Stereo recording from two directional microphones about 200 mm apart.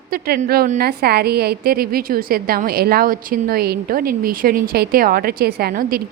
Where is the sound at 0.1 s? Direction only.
50° right (ahead or behind).